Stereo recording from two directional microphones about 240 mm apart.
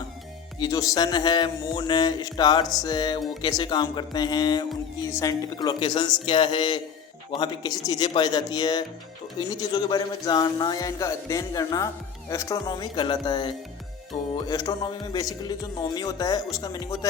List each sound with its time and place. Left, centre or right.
0.6 s speech: centre